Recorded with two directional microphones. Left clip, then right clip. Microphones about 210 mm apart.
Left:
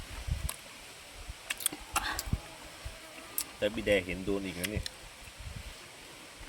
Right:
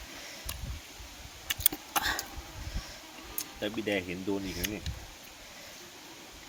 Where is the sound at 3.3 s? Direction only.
20° left (ahead or behind).